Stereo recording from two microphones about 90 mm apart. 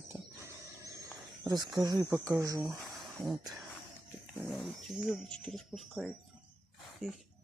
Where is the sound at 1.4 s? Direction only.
50° right (ahead or behind).